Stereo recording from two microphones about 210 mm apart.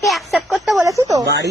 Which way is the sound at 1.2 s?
55° right (ahead or behind).